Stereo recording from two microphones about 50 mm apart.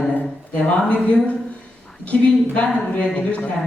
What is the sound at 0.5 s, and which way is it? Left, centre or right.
Speech, left.